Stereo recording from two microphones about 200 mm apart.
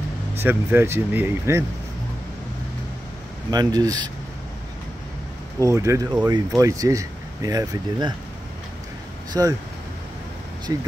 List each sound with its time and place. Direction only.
0.4 s speech: 10° right (ahead or behind)
3.4 s speech: 20° right (ahead or behind)
5.6 s speech: 15° right (ahead or behind)
9.3 s speech: 20° right (ahead or behind)
10.7 s speech: 20° right (ahead or behind)